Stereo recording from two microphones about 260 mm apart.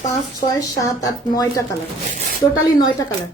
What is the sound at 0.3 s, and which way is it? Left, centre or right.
A woman's voice, centre.